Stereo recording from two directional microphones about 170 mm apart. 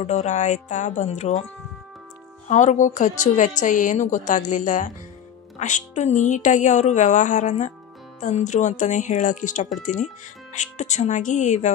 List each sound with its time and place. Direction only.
0.0 s a woman's voice: 45° left (ahead or behind)
2.4 s a woman's voice: 45° left (ahead or behind)